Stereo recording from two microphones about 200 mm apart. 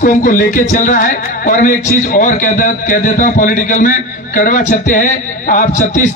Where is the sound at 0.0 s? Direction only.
40° left (ahead or behind).